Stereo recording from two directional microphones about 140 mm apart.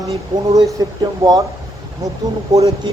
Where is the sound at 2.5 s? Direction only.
25° right (ahead or behind).